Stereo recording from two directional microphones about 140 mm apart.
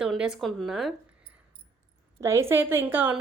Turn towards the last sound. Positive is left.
turn(degrees=-15)  # may be behind; listen again after turning